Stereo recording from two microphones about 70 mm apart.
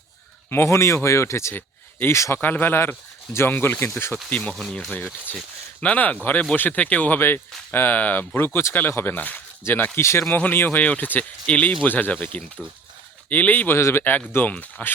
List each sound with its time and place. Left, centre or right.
0.5 s speech: left
2.4 s speech: left
4.5 s speech: centre; by 7.2 s left
7.2 s speech: left
13.7 s speech: left